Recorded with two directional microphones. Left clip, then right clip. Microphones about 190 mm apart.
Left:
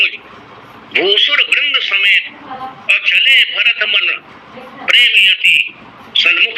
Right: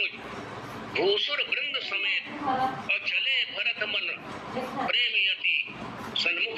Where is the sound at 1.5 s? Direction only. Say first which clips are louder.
Left 16 dB; 45° left (ahead or behind).